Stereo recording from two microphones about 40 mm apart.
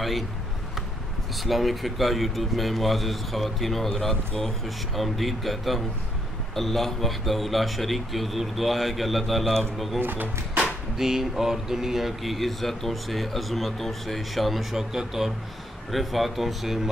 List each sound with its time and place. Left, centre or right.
1.4 s speech: centre
9.9 s speech: right
11.0 s speech: centre